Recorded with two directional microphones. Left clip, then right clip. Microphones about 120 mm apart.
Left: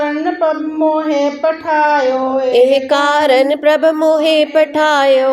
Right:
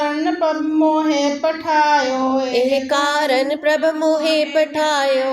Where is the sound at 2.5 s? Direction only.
55° left (ahead or behind).